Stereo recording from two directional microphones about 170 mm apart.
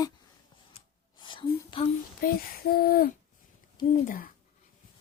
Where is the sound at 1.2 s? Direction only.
25° left (ahead or behind).